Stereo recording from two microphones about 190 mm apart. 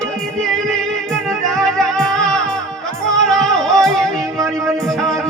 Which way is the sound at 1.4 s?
5° left (ahead or behind).